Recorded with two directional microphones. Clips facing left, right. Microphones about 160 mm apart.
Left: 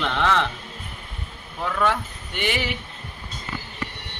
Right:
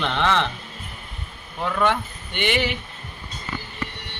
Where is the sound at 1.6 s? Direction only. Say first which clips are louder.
Right 1 dB; centre (ahead or behind).